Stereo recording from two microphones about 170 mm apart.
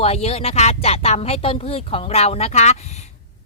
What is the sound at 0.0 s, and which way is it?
A woman's voice, 35° left (ahead or behind).